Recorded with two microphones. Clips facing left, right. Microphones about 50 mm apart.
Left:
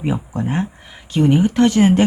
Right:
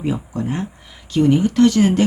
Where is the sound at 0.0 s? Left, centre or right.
Left.